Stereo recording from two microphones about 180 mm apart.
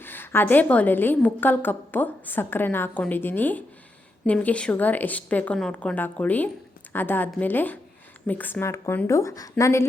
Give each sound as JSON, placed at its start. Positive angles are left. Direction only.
{"t": 0.0, "sound": "a woman's voice", "side_deg": 10}